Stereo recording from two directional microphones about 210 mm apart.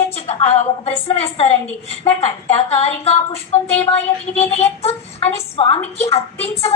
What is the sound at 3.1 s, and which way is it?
Speech, 30° left (ahead or behind).